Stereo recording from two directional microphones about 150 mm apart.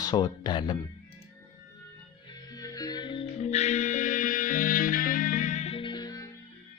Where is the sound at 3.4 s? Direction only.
50° left (ahead or behind).